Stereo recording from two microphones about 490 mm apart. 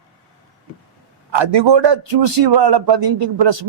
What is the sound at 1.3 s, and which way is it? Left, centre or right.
A man's voice, right.